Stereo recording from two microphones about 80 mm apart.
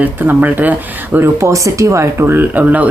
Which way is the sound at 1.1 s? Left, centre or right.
Right.